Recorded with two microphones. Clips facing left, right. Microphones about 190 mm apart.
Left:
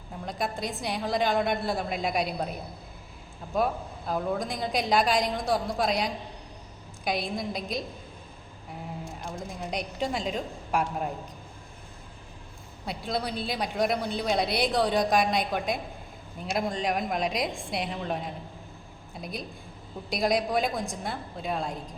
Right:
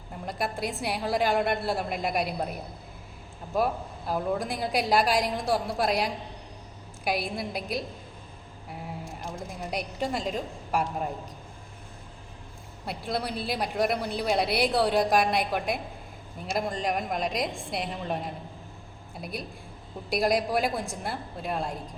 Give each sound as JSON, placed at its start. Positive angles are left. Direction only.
{"t": 0.3, "sound": "a woman's voice", "side_deg": -5}
{"t": 9.2, "sound": "a man's voice", "side_deg": -5}
{"t": 12.8, "sound": "a man's voice", "side_deg": -5}